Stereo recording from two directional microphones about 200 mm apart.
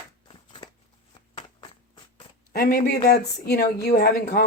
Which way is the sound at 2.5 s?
50° left (ahead or behind).